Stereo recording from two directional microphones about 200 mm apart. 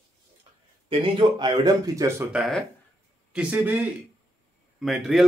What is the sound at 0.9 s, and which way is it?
Speech, 25° right (ahead or behind).